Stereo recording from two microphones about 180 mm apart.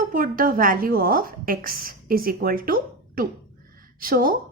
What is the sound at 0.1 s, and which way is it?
A woman's voice, 50° right (ahead or behind).